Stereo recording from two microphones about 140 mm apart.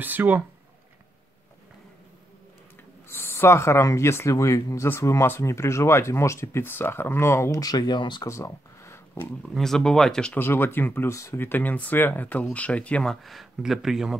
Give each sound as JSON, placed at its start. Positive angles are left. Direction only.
{"t": 0.0, "sound": "speech", "side_deg": -15}
{"t": 3.1, "sound": "speech", "side_deg": 15}
{"t": 8.3, "sound": "a sound", "side_deg": 20}
{"t": 9.4, "sound": "speech", "side_deg": 5}